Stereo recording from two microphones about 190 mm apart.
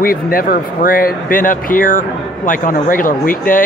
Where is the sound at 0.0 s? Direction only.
50° left (ahead or behind).